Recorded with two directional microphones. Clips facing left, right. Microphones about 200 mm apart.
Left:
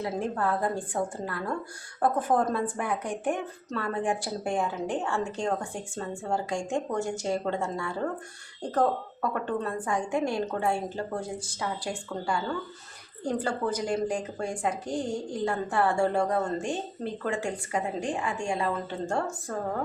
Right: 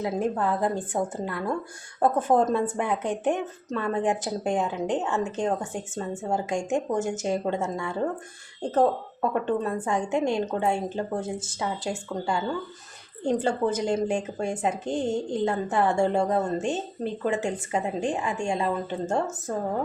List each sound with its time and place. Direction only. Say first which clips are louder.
0.0 s speech: right 3 dB; 20° right (ahead or behind)